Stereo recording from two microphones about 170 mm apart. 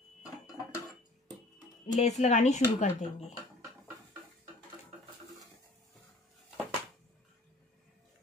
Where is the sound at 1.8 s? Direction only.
45° left (ahead or behind).